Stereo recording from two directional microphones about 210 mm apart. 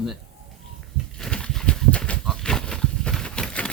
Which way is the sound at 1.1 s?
5° left (ahead or behind).